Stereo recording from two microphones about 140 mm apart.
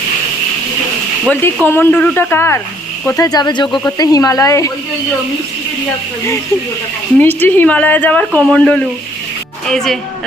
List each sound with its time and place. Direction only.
1.3 s speech: 15° left (ahead or behind)
3.2 s speech: 30° left (ahead or behind)
7.2 s speech: 15° left (ahead or behind)